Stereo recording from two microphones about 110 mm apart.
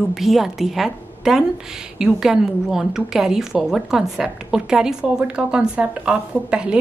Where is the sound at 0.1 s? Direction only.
Centre (ahead or behind).